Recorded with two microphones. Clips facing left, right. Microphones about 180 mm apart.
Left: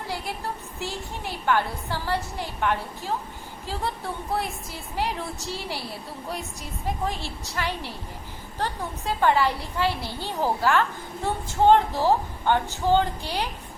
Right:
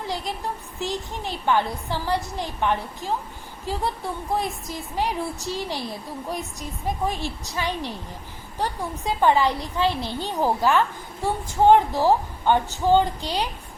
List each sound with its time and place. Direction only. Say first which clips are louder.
0.8 s a woman's voice: right 4 dB; 20° right (ahead or behind)